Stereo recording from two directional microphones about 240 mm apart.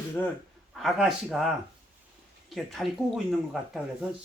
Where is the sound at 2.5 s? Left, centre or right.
Centre.